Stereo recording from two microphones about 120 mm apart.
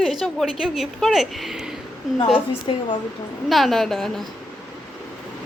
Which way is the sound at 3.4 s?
Centre (ahead or behind).